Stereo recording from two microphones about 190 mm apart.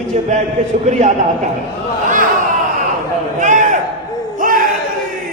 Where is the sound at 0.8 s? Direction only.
40° right (ahead or behind).